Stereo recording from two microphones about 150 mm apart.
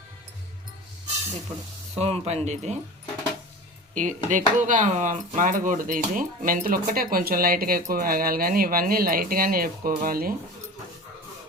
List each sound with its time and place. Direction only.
2.0 s speech: 40° right (ahead or behind)
3.9 s speech: 55° right (ahead or behind); by 10.3 s 75° right (ahead or behind)